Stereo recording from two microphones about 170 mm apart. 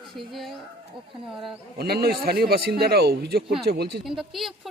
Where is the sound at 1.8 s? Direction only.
65° right (ahead or behind).